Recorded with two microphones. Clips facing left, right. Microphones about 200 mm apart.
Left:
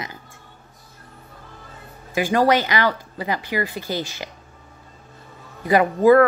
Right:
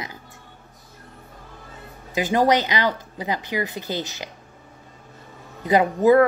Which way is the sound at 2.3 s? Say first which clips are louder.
Left 1 dB; 20° right (ahead or behind).